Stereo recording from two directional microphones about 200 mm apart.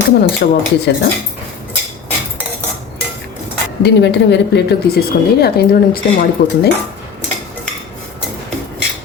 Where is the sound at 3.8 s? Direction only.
60° left (ahead or behind).